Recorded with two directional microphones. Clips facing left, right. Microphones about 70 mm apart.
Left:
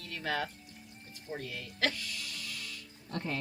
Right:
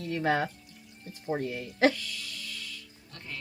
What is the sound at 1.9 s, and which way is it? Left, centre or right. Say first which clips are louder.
Music: right 1 dB; left.